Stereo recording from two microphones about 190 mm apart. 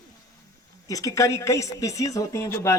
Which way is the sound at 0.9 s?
20° left (ahead or behind).